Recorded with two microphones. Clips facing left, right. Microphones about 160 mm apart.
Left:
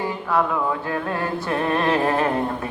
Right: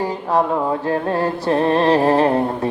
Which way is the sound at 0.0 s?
40° right (ahead or behind).